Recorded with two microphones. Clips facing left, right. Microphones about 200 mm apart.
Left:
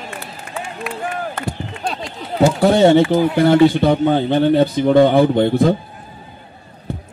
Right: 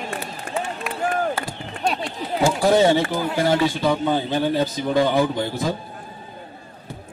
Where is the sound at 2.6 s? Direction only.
60° left (ahead or behind).